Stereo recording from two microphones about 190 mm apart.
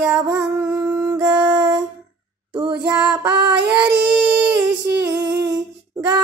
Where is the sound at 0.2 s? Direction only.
15° right (ahead or behind).